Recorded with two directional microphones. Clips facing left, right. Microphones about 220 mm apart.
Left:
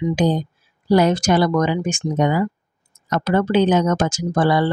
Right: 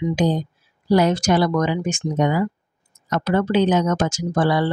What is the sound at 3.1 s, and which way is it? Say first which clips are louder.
Speech: left 1 dB; 50° left (ahead or behind).